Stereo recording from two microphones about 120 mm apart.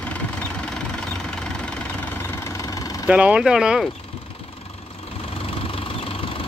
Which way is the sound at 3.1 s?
10° right (ahead or behind).